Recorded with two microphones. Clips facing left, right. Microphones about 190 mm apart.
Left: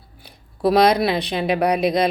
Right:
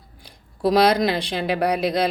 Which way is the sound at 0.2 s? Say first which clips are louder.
Left 2 dB; 65° left (ahead or behind).